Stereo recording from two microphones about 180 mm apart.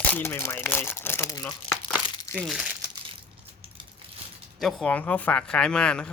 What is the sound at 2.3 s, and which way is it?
Speech, centre (ahead or behind).